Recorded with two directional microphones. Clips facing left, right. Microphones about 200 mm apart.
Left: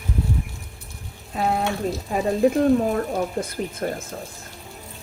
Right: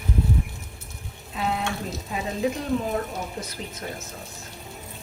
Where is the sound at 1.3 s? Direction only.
45° left (ahead or behind).